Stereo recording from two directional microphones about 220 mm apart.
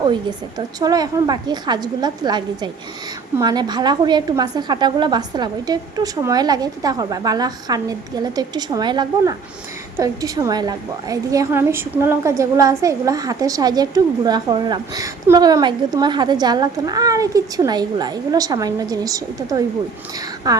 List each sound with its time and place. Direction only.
0.0 s a woman's voice: 20° right (ahead or behind)